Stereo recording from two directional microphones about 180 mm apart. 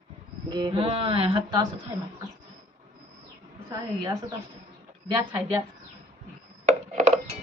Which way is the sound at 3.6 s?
20° right (ahead or behind).